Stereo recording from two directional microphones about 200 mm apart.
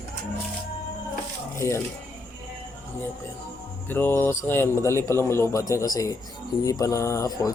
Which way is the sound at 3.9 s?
10° left (ahead or behind).